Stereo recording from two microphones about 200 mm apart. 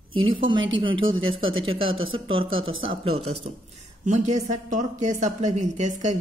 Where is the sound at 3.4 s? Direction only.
35° right (ahead or behind).